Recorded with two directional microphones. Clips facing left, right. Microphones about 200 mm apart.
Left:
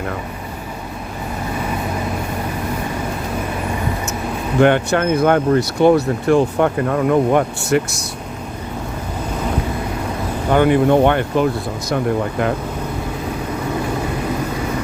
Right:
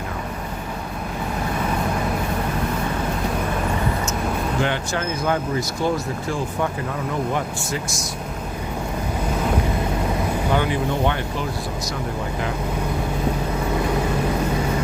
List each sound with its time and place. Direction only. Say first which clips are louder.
4.6 s speech: left 10 dB; 60° left (ahead or behind)
10.5 s speech: left 12 dB; 55° left (ahead or behind)